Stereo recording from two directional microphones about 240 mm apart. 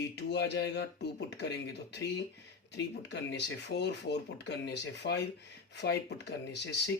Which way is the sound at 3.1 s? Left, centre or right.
Left.